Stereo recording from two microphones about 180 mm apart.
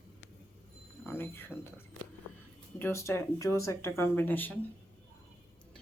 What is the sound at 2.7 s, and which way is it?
Speech, 15° left (ahead or behind).